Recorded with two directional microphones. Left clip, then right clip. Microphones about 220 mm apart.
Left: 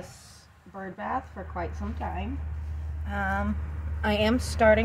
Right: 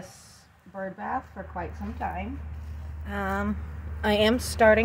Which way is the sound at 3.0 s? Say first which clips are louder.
Even; 45° right (ahead or behind).